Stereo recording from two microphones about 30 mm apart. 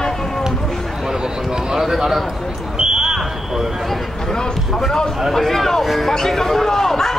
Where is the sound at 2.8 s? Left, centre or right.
Right.